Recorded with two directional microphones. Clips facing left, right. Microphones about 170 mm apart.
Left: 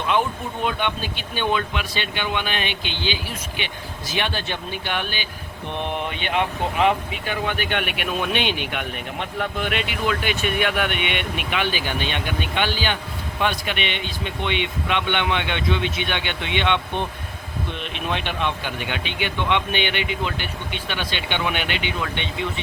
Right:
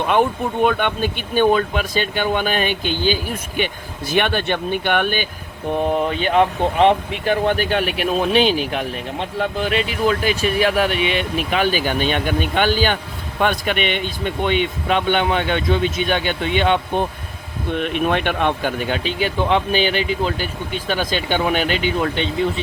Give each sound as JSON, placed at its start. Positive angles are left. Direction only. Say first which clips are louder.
{"t": 0.0, "sound": "speech", "louder": "right 5 dB", "side_deg": -55}
{"t": 5.7, "sound": "speech", "louder": "right 8 dB", "side_deg": -40}
{"t": 17.7, "sound": "speech", "louder": "right 10 dB", "side_deg": -50}